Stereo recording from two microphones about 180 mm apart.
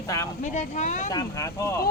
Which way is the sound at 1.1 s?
20° left (ahead or behind).